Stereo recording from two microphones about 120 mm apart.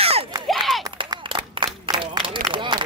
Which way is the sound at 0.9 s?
40° right (ahead or behind).